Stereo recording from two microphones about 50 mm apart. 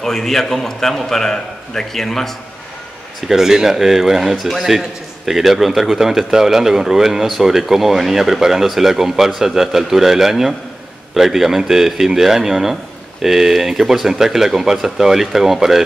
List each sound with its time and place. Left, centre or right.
0.0 s a man's voice: centre
3.3 s a man's voice: centre